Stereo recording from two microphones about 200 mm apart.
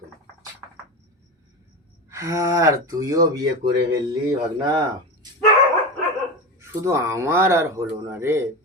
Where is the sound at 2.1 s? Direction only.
15° right (ahead or behind).